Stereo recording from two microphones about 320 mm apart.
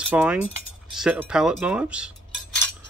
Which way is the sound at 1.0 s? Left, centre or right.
Centre.